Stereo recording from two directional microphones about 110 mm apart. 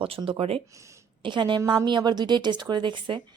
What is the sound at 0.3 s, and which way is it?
Speech, 60° right (ahead or behind).